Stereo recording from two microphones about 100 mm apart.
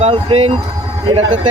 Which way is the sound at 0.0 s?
80° right.